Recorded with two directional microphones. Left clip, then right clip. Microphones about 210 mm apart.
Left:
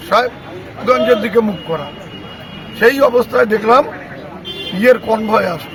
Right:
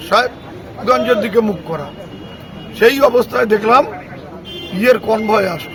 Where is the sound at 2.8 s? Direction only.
25° right (ahead or behind).